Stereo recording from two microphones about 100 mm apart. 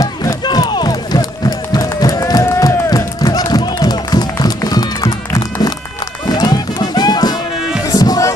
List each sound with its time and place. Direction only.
0.0 s run: 35° left (ahead or behind)
6.2 s music: 40° left (ahead or behind)